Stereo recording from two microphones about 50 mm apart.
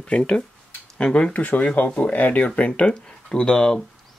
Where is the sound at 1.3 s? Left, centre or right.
Left.